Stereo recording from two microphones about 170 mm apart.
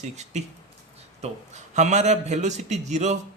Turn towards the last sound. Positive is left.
turn(degrees=-40)  # may be behind; listen again after turning